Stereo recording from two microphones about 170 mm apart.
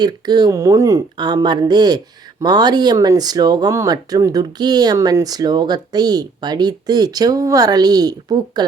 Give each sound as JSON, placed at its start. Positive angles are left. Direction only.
{"t": 0.0, "sound": "speech", "side_deg": -25}